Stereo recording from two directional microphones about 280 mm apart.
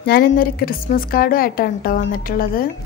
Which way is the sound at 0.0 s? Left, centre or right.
Left.